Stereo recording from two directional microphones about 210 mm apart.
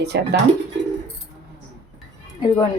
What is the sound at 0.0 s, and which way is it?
Speech, 50° right (ahead or behind).